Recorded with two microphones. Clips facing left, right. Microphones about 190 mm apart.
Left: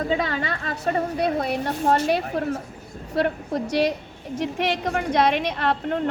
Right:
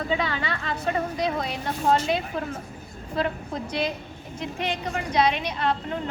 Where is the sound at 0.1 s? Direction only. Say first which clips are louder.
Left 3 dB; 45° left (ahead or behind).